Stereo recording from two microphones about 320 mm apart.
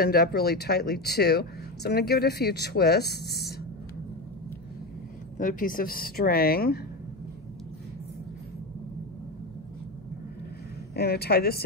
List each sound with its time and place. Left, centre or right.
0.0 s speech: left
5.4 s speech: left
11.0 s speech: left